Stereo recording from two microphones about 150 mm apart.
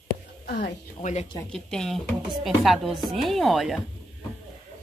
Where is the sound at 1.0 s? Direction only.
50° left (ahead or behind).